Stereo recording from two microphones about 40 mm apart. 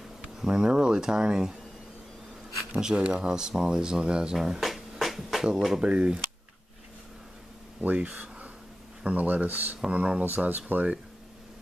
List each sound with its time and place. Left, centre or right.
0.5 s speech: centre
2.8 s speech: centre
4.6 s music: centre
5.9 s speech: right
7.8 s speech: right
9.8 s speech: right
10.2 s speech: right